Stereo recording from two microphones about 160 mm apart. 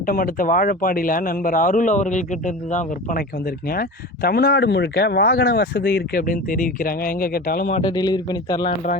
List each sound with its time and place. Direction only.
0.0 s speech: 65° left (ahead or behind)
7.8 s speech: 25° left (ahead or behind)